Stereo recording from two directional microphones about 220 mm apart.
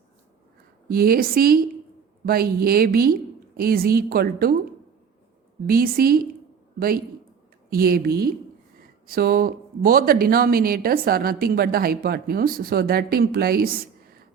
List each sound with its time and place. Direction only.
0.9 s speech: 45° right (ahead or behind)
5.6 s a man's voice: 40° right (ahead or behind)